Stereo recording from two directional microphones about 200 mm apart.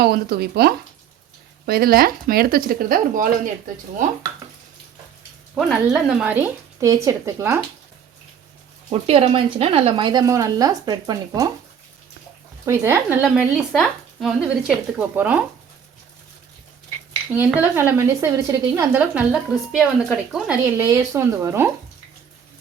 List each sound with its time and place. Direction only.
0.0 s speech: 55° right (ahead or behind)
5.5 s speech: centre (ahead or behind)
8.9 s speech: 30° right (ahead or behind)
12.6 s speech: 15° right (ahead or behind)
17.3 s speech: 10° right (ahead or behind)